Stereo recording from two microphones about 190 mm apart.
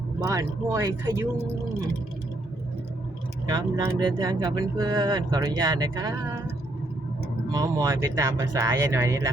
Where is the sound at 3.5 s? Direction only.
20° right (ahead or behind).